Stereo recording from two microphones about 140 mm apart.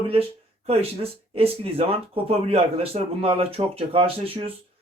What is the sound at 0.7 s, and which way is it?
Speech, 45° right (ahead or behind).